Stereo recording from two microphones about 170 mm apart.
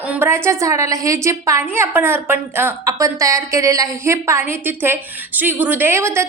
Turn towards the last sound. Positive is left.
turn(degrees=-15)  # may be behind; listen again after turning